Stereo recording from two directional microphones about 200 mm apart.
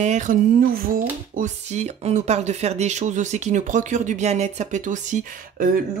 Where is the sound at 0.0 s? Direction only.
35° right (ahead or behind).